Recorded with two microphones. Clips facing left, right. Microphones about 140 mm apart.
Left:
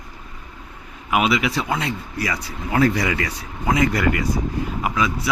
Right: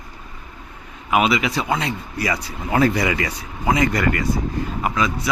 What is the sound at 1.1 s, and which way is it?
Speech, centre (ahead or behind).